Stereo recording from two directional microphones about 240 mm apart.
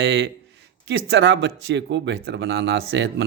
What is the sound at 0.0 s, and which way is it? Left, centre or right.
A man's voice, right.